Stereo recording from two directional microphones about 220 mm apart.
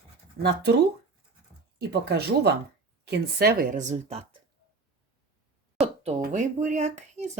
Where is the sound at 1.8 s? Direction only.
50° right (ahead or behind); by 4.2 s 30° right (ahead or behind).